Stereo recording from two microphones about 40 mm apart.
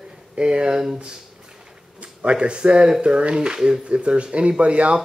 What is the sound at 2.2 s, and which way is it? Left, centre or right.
Speech, right.